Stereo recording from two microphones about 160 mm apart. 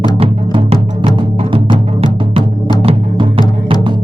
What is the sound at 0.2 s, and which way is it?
Music, 35° right (ahead or behind).